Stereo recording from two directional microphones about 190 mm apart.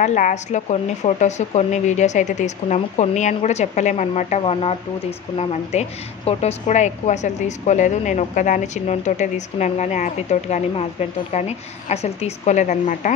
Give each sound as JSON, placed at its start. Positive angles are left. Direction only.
{"t": 0.0, "sound": "a woman's voice", "side_deg": 40}